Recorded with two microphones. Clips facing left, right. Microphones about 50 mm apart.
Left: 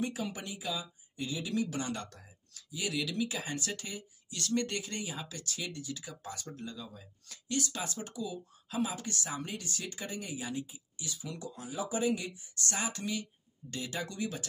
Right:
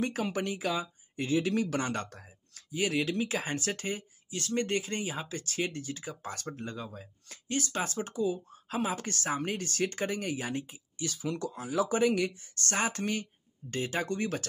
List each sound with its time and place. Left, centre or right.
0.0 s speech: right
11.1 s speech: right